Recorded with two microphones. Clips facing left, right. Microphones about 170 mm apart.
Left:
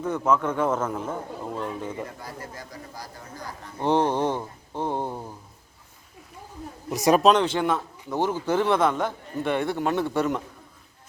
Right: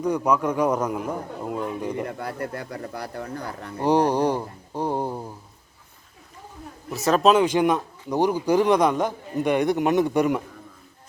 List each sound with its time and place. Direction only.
0.0 s a man's voice: 15° right (ahead or behind)
2.0 s speech: 60° right (ahead or behind)
3.8 s a man's voice: 10° right (ahead or behind)
6.9 s speech: 15° left (ahead or behind)
7.2 s a man's voice: 5° right (ahead or behind)